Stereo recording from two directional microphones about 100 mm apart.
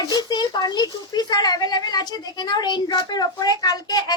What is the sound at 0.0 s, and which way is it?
A woman's voice, 45° left (ahead or behind).